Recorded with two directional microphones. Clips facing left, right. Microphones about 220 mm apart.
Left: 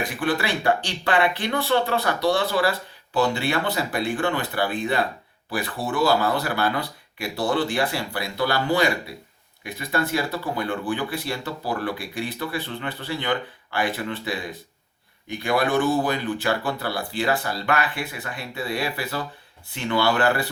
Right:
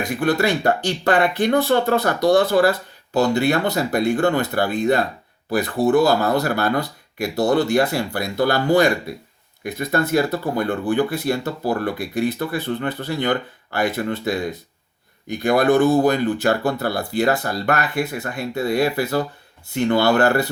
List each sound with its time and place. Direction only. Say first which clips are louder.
0.2 s speech: right 6 dB; 45° right (ahead or behind)